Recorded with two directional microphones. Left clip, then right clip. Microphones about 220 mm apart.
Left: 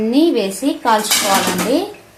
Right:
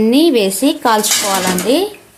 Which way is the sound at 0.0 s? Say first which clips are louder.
Right 3 dB; 35° right (ahead or behind).